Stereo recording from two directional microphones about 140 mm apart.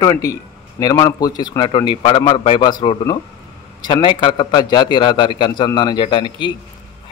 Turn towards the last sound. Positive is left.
turn(degrees=35)  # may be behind; listen again after turning